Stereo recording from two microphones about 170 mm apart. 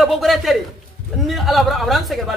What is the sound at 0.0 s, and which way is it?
A man's voice, centre (ahead or behind).